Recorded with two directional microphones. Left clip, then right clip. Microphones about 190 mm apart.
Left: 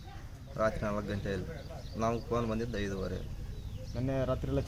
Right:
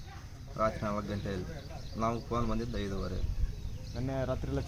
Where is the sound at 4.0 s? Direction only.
35° left (ahead or behind).